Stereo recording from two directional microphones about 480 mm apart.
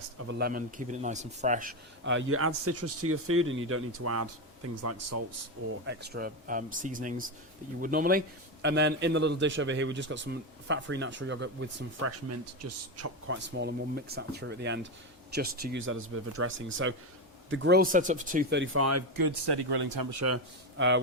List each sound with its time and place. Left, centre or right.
0.3 s speech: centre
5.8 s speech: right
19.2 s speech: right